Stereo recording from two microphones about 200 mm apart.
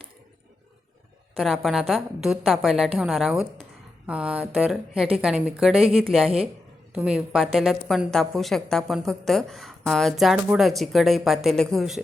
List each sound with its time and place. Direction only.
1.4 s a woman's voice: centre (ahead or behind)
6.2 s a woman's voice: 30° right (ahead or behind)
6.9 s a woman's voice: 5° right (ahead or behind)